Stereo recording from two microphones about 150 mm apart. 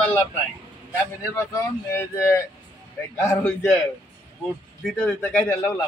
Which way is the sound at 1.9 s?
15° left (ahead or behind).